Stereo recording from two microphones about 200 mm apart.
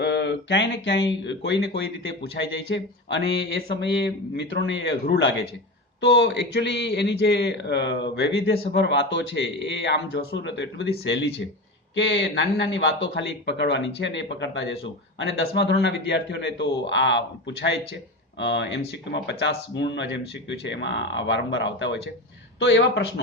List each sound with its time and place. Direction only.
0.0 s speech: 55° left (ahead or behind)